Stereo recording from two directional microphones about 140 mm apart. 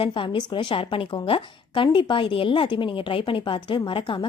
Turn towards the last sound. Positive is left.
turn(degrees=35)  # may be behind; listen again after turning